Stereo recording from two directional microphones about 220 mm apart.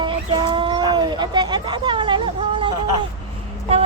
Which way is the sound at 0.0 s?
20° right (ahead or behind).